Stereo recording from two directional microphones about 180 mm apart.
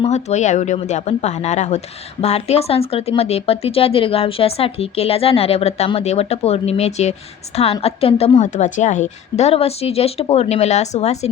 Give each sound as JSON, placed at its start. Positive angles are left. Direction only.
{"t": 0.0, "sound": "a woman's voice", "side_deg": 40}